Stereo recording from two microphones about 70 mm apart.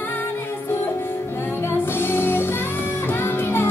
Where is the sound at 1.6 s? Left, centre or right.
Left.